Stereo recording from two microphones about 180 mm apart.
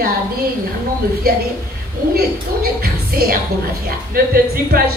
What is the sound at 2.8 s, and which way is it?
Music, 55° right (ahead or behind).